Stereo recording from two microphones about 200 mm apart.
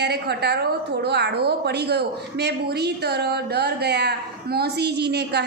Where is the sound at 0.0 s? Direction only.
55° right (ahead or behind).